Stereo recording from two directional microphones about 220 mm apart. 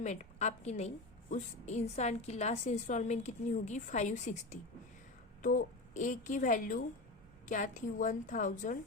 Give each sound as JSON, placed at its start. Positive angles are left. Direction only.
{"t": 0.0, "sound": "a woman's voice", "side_deg": 30}